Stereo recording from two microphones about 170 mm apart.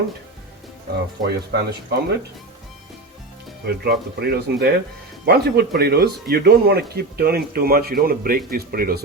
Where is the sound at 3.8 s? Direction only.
70° right (ahead or behind).